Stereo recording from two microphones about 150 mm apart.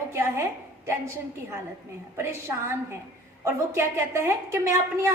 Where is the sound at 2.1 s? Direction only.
15° right (ahead or behind).